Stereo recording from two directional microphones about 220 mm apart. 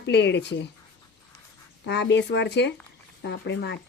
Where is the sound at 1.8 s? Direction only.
50° left (ahead or behind).